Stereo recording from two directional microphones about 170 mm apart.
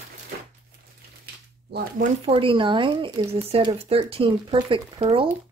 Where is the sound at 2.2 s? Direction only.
30° right (ahead or behind).